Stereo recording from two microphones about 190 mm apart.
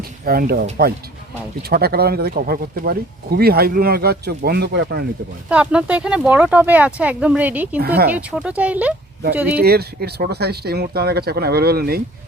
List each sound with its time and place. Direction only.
0.3 s speech: 55° right (ahead or behind)
5.5 s speech: 5° right (ahead or behind)
7.8 s speech: 55° right (ahead or behind)
8.4 s speech: 5° right (ahead or behind)
9.6 s speech: 55° right (ahead or behind)